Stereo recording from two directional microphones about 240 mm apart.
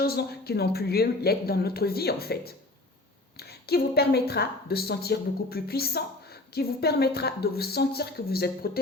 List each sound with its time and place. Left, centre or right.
0.0 s a woman's voice: left